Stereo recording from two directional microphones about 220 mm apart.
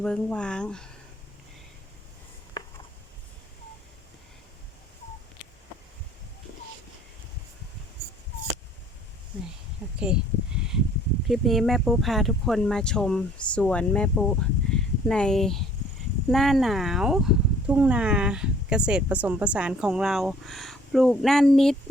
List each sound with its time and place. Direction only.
0.0 s speech: 5° left (ahead or behind)
2.6 s a sound: 20° left (ahead or behind)
11.3 s speech: centre (ahead or behind)